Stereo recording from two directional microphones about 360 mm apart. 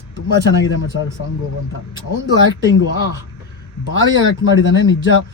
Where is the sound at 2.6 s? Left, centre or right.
Centre.